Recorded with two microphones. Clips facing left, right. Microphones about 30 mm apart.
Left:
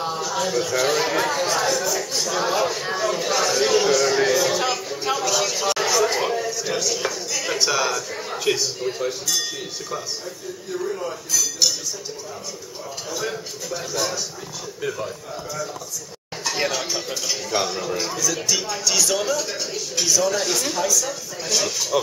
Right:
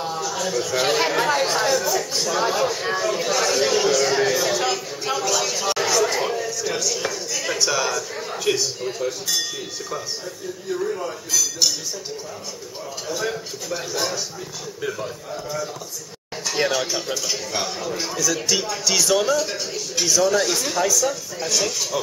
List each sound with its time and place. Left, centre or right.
0.0 s a sound: centre
0.7 s speech: centre
1.8 s speech: centre
2.2 s a sound: centre
6.1 s a man's voice: centre
10.7 s speech: centre
13.1 s speech: centre
16.5 s speech: centre
17.9 s speech: centre